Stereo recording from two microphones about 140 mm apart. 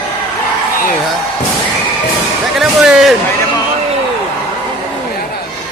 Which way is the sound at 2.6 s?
Centre (ahead or behind).